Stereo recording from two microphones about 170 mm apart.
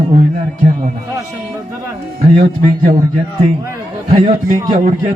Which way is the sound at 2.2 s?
40° right (ahead or behind).